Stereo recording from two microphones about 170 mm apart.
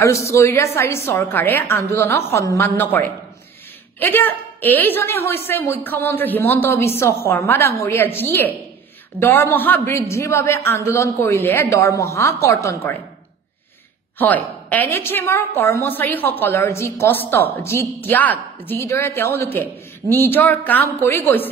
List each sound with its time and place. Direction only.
0.3 s a woman's voice: 15° left (ahead or behind)
14.1 s a woman's voice: 10° left (ahead or behind)